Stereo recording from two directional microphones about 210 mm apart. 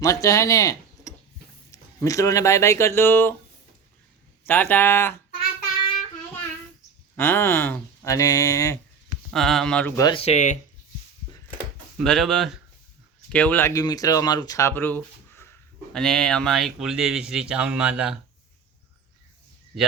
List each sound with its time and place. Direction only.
0.0 s speech: 15° left (ahead or behind)
4.4 s speech: 10° left (ahead or behind)
7.2 s speech: 10° left (ahead or behind)
9.3 s speech: centre (ahead or behind); by 10.6 s 35° left (ahead or behind)
11.9 s speech: centre (ahead or behind)